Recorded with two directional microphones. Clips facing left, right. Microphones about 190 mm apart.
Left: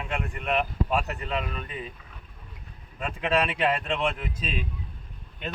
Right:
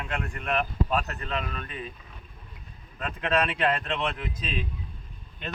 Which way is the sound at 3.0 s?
10° left (ahead or behind).